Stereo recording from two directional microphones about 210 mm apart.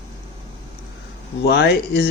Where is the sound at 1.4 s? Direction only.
50° left (ahead or behind).